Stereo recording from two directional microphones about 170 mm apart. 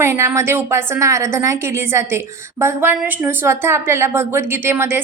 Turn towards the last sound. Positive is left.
turn(degrees=-15)  # may be behind; listen again after turning